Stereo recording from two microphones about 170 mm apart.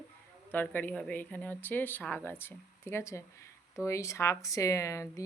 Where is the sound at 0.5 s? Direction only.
10° left (ahead or behind).